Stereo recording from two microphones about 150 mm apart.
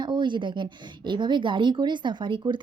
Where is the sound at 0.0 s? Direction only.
30° right (ahead or behind).